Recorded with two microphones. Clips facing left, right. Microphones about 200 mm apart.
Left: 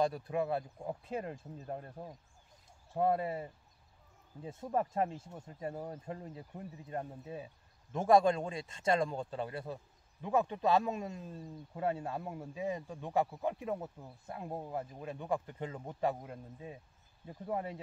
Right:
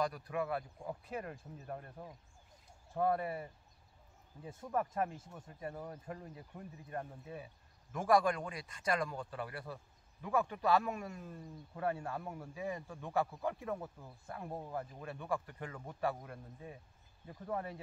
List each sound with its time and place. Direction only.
0.0 s a man's voice: 25° left (ahead or behind)